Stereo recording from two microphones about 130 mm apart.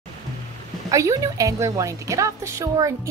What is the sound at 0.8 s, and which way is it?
A woman's voice, 25° right (ahead or behind).